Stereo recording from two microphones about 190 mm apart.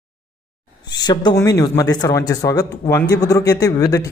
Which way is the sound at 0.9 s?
20° left (ahead or behind).